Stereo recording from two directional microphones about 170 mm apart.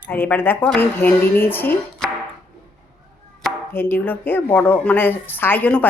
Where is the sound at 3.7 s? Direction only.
15° left (ahead or behind).